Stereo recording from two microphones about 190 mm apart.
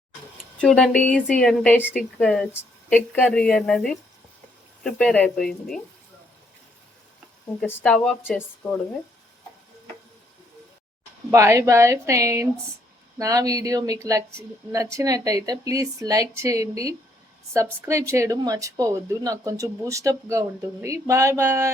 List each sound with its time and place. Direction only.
0.6 s speech: 5° left (ahead or behind)
7.6 s speech: 10° left (ahead or behind)
11.3 s speech: 15° right (ahead or behind)